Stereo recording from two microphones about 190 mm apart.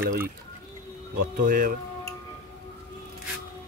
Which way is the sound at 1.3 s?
50° right (ahead or behind).